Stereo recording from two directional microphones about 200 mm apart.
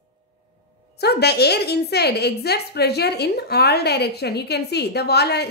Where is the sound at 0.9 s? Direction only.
55° left (ahead or behind).